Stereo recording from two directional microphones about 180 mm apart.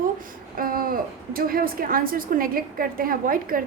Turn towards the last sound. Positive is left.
turn(degrees=-55)  # may be behind; listen again after turning